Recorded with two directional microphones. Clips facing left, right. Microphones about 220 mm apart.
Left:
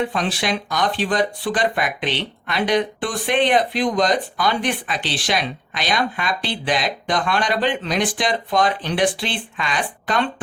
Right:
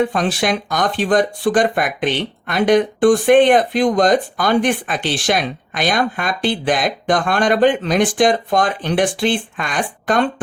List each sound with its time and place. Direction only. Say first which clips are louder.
0.0 s speech: right 5 dB; 45° right (ahead or behind)